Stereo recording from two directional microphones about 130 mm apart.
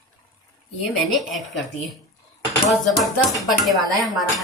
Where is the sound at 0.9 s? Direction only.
Centre (ahead or behind).